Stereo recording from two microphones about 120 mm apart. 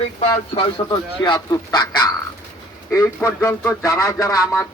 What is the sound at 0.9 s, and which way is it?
Speech, 35° left (ahead or behind).